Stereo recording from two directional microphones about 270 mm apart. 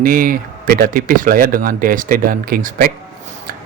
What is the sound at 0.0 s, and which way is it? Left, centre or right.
Speech, right.